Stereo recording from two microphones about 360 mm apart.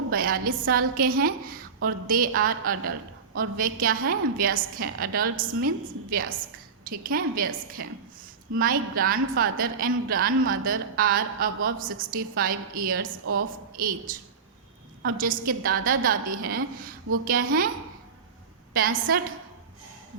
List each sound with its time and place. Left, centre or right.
0.1 s a woman's voice: right
18.7 s a woman's voice: right